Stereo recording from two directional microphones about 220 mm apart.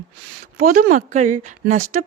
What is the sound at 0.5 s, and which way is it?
Speech, 40° right (ahead or behind).